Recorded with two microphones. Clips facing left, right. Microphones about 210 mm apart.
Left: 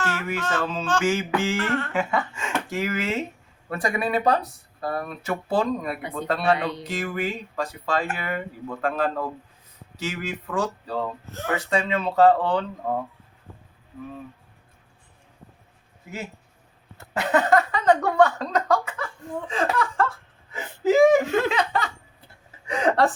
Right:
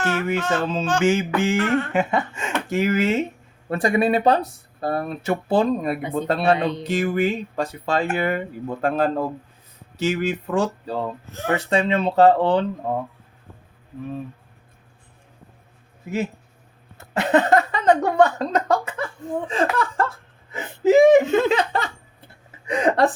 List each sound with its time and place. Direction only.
0.0 s speech: 20° right (ahead or behind)
10.0 s speech: 25° right (ahead or behind)
17.0 s a woman's voice: 25° right (ahead or behind)